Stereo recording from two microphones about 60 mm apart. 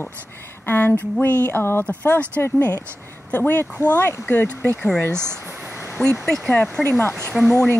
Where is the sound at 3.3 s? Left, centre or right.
Left.